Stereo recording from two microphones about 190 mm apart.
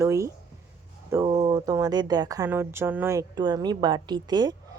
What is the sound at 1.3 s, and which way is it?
Speech, 25° right (ahead or behind).